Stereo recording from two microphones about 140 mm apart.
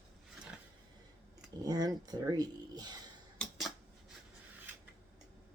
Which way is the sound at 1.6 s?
30° right (ahead or behind).